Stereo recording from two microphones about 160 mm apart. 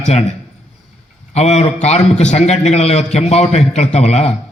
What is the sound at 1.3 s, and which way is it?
A man's voice, 45° left (ahead or behind).